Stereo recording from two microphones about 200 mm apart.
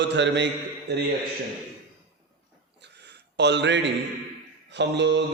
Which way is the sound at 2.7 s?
60° right (ahead or behind).